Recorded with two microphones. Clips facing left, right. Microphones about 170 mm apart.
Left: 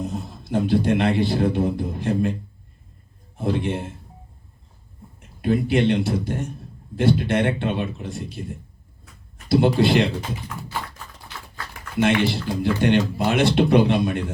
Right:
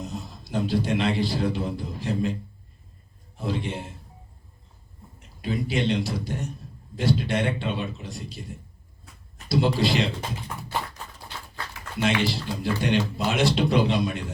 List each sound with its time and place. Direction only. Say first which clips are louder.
0.0 s speech: left 6 dB; 55° left (ahead or behind)
3.3 s speech: left 6 dB; 55° left (ahead or behind)
5.4 s speech: left 7 dB; 55° left (ahead or behind)
9.7 s speech: left 6 dB; 60° left (ahead or behind)
11.7 s speech: left 5 dB; 55° left (ahead or behind)